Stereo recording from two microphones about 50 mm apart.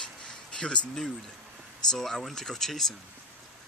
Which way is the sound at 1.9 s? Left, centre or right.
Centre.